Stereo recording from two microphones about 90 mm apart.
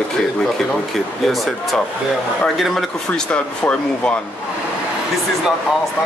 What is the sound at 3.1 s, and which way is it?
Speech, 15° left (ahead or behind).